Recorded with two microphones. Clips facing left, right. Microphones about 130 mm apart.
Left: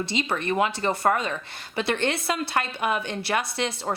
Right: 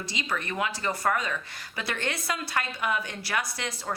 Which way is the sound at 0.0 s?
25° left (ahead or behind).